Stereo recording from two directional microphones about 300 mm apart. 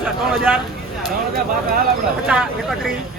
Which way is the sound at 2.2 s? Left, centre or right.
Centre.